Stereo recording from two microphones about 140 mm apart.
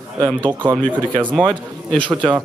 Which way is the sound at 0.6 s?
35° right (ahead or behind).